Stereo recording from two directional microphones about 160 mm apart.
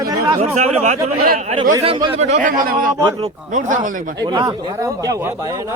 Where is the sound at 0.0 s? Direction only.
25° right (ahead or behind).